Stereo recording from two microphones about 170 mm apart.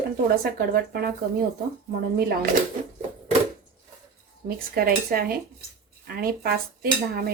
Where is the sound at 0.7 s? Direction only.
65° right (ahead or behind).